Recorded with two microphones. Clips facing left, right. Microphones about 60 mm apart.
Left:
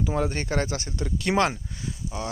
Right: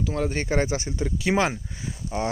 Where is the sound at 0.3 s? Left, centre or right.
Centre.